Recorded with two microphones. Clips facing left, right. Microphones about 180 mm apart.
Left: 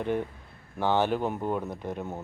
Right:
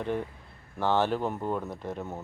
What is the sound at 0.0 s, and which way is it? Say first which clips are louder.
Speech: left 2 dB; centre (ahead or behind).